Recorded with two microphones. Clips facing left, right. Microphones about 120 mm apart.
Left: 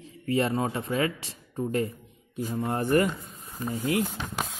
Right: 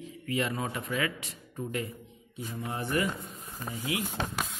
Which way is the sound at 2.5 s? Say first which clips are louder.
Left 8 dB; 50° left (ahead or behind).